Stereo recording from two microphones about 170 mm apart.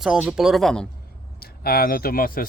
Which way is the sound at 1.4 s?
65° left (ahead or behind).